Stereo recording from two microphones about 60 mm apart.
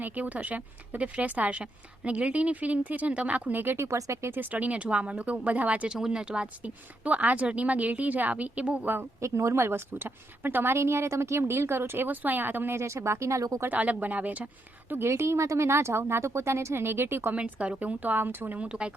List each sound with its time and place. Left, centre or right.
0.0 s a woman's voice: right
3.6 s speech: right
3.8 s speech: right
4.5 s a woman's voice: right
9.2 s a woman's voice: right
12.8 s speech: right
13.7 s a woman's voice: right
15.0 s a woman's voice: right
17.3 s a woman's voice: right
18.5 s a woman's voice: centre